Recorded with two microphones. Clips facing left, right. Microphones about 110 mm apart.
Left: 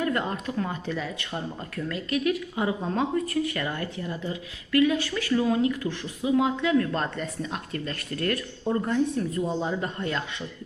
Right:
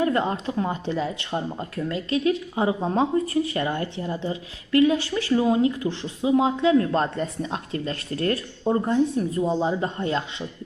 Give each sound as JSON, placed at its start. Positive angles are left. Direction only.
{"t": 0.0, "sound": "speech", "side_deg": -25}